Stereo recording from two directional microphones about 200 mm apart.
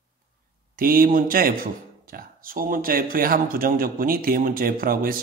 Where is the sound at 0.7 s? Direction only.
45° right (ahead or behind).